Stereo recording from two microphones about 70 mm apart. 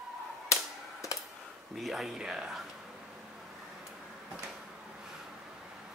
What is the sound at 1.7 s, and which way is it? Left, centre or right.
Speech, centre.